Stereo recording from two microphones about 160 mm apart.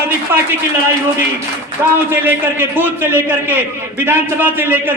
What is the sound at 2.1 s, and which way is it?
A man's voice, 15° right (ahead or behind).